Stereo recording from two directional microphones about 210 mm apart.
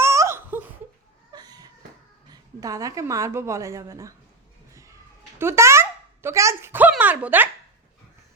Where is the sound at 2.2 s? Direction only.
15° right (ahead or behind).